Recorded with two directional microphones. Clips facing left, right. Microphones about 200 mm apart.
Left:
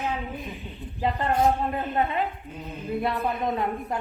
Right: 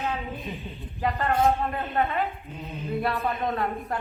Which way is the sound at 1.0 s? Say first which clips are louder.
Even; 20° left (ahead or behind).